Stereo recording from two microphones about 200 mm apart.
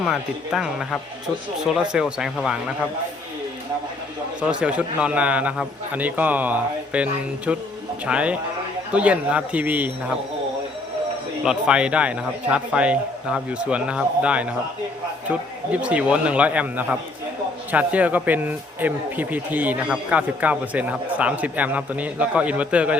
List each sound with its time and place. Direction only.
0.0 s a man's voice: centre (ahead or behind)
4.4 s a man's voice: 5° right (ahead or behind)
11.4 s a man's voice: 5° right (ahead or behind)